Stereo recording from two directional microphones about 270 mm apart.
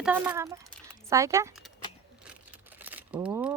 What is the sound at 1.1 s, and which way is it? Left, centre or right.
Speech, centre.